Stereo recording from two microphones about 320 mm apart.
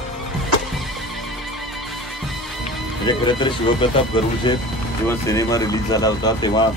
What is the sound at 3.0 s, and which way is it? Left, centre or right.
Speech, centre.